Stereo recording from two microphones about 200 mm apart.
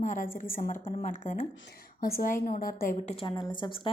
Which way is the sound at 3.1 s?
20° left (ahead or behind).